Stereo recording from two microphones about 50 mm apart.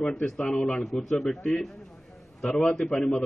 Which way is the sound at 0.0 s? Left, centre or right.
Centre.